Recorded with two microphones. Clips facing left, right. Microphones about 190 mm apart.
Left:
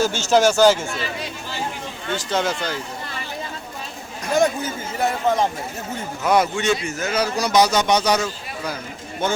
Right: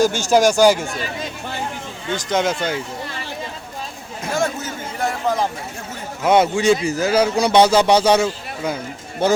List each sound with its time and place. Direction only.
0.0 s speech: 10° right (ahead or behind)
2.1 s a man's voice: 15° right (ahead or behind)
4.9 s a sound: centre (ahead or behind)
6.2 s a man's voice: 25° right (ahead or behind)